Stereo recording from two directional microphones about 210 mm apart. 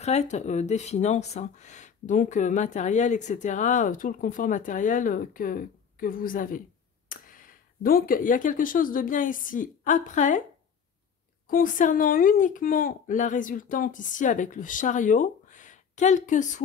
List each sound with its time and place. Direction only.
0.0 s a woman's voice: 30° left (ahead or behind)
11.4 s a woman's voice: 40° left (ahead or behind)